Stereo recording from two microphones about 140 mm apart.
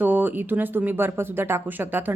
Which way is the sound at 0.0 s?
10° right (ahead or behind).